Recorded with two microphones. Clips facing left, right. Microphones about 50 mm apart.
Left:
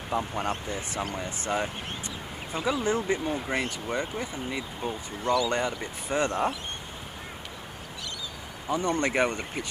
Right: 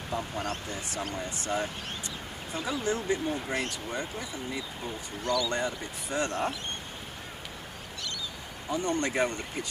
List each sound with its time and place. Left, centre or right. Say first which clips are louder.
0.1 s speech: left 4 dB; left
4.5 s speech: left 4 dB; left
5.2 s speech: left 4 dB; centre
5.5 s speech: left 3 dB; left
8.6 s speech: left 3 dB; left